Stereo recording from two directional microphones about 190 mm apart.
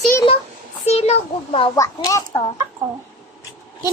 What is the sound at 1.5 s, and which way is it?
Speech, 25° left (ahead or behind).